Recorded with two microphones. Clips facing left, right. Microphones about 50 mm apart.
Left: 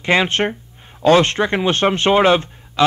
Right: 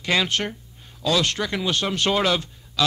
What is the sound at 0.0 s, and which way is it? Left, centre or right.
Speech, left.